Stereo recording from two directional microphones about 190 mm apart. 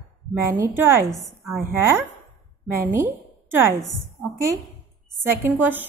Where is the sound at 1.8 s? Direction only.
15° right (ahead or behind).